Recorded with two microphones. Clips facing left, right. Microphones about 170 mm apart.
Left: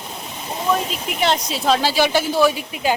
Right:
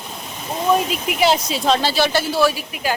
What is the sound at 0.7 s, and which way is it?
Speech, 10° right (ahead or behind).